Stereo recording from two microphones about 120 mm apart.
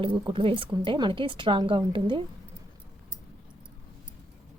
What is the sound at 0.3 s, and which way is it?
A woman's voice, 45° right (ahead or behind).